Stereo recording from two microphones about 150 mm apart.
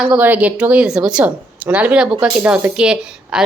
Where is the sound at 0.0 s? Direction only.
10° right (ahead or behind).